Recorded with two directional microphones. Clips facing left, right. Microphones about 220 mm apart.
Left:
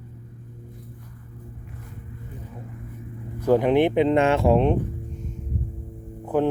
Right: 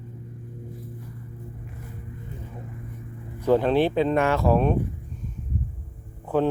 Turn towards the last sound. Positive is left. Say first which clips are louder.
# left 1 dB
turn(degrees=15)  # may be behind; listen again after turning